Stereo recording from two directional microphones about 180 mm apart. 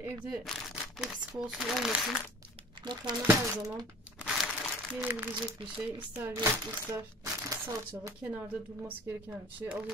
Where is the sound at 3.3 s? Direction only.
15° right (ahead or behind).